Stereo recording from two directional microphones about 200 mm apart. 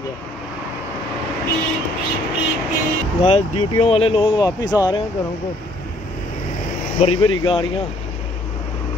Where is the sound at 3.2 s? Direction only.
30° left (ahead or behind).